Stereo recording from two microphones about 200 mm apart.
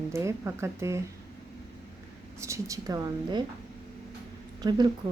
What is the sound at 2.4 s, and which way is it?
Speech, 15° right (ahead or behind).